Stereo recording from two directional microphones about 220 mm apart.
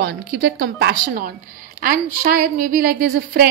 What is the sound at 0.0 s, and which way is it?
A woman's voice, 45° right (ahead or behind).